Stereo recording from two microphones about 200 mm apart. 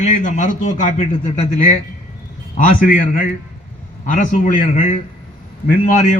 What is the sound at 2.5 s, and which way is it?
A man's voice, 40° left (ahead or behind).